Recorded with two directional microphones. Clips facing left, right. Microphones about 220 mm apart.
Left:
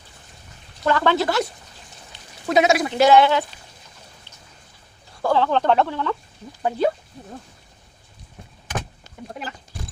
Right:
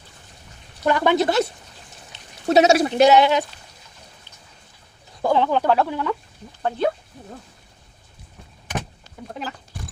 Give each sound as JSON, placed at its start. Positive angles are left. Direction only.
{"t": 0.9, "sound": "speech", "side_deg": -15}
{"t": 2.5, "sound": "a woman's voice", "side_deg": -30}
{"t": 2.9, "sound": "speech", "side_deg": -20}
{"t": 5.2, "sound": "speech", "side_deg": -15}
{"t": 6.6, "sound": "speech", "side_deg": 5}